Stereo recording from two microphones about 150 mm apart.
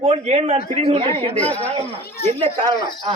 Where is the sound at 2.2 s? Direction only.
45° right (ahead or behind).